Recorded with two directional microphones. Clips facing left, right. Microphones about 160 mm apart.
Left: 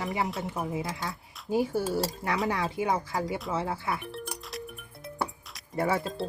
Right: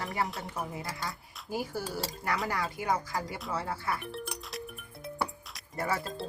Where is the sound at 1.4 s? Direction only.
25° left (ahead or behind).